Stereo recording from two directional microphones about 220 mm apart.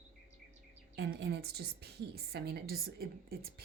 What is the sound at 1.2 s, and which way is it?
A woman's voice, 50° right (ahead or behind).